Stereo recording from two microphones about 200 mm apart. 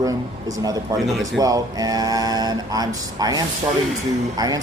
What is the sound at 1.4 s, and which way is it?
A man's voice, 15° right (ahead or behind).